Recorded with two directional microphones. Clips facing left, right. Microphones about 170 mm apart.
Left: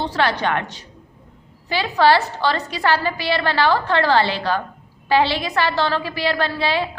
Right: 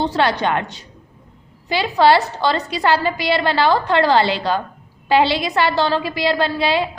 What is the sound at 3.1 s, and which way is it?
A woman's voice, 20° right (ahead or behind).